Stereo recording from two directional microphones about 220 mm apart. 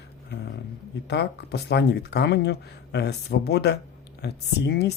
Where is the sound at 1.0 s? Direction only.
50° left (ahead or behind).